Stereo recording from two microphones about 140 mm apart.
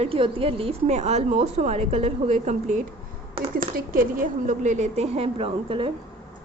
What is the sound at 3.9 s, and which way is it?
Speech, 80° right.